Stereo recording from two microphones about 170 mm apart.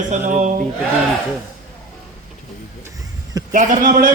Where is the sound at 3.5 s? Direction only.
50° right (ahead or behind).